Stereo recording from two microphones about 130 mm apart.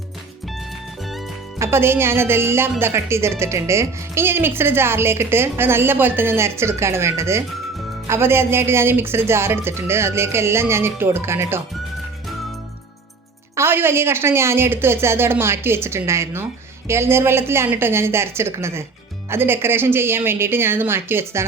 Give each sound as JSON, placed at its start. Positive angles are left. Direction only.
{"t": 1.5, "sound": "speech", "side_deg": -20}
{"t": 13.6, "sound": "a woman's voice", "side_deg": -20}